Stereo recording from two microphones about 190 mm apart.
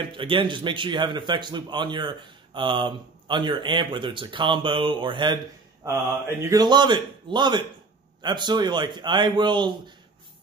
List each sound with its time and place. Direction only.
0.0 s speech: 25° right (ahead or behind)
6.4 s speech: 20° right (ahead or behind)